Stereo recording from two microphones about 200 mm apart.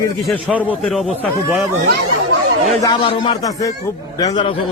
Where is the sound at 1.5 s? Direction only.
10° right (ahead or behind).